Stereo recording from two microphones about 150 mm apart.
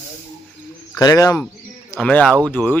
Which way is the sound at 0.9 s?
25° left (ahead or behind).